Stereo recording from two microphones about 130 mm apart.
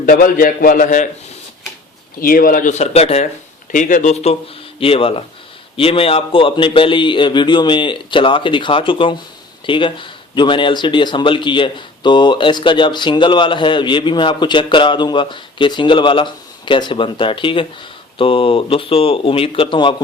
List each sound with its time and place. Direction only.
0.0 s a man's voice: 90° left
2.2 s speech: 90° left; by 3.2 s 55° left (ahead or behind)
3.7 s speech: 85° left; by 4.4 s 55° left (ahead or behind)
4.8 s speech: 45° left (ahead or behind)